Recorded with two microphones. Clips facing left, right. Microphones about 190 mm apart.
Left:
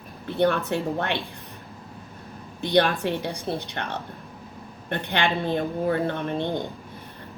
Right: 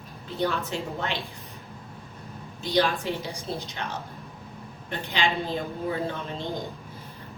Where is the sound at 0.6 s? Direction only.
60° left (ahead or behind).